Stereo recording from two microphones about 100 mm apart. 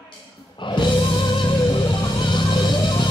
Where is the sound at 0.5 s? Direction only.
50° left (ahead or behind).